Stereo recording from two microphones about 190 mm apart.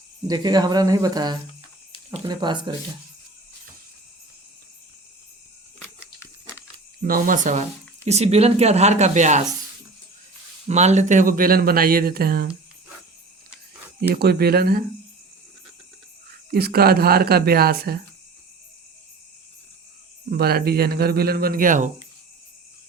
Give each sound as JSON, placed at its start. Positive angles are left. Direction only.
{"t": 0.3, "sound": "speech", "side_deg": -20}
{"t": 7.0, "sound": "speech", "side_deg": -50}
{"t": 10.7, "sound": "speech", "side_deg": -35}
{"t": 14.1, "sound": "speech", "side_deg": -55}
{"t": 16.5, "sound": "speech", "side_deg": -55}
{"t": 20.3, "sound": "speech", "side_deg": -55}